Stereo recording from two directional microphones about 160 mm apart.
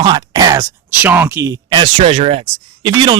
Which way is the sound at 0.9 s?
15° right (ahead or behind).